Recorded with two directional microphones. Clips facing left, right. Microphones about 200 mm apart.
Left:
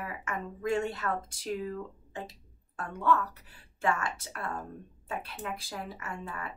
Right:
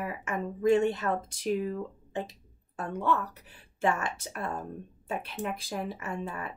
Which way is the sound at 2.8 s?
20° right (ahead or behind).